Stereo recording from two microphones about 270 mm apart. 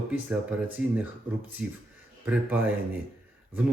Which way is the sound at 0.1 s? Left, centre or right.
Centre.